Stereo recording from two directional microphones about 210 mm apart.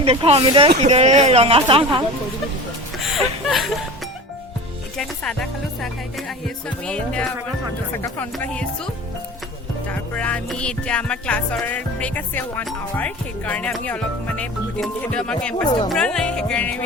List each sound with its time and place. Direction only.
0.0 s speech: 30° right (ahead or behind)
3.2 s a sound: centre (ahead or behind)
4.9 s music: 5° left (ahead or behind)
8.0 s speech: 10° left (ahead or behind)
9.9 s music: 5° left (ahead or behind)